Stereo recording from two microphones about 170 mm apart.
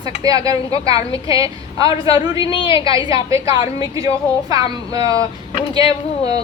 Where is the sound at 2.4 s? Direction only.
30° left (ahead or behind).